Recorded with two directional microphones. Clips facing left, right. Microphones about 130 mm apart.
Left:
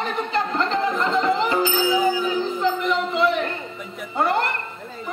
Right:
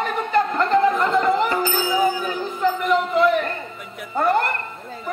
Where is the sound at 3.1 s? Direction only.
45° right (ahead or behind).